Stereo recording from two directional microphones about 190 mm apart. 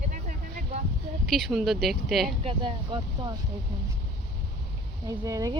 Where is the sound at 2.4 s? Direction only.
25° right (ahead or behind).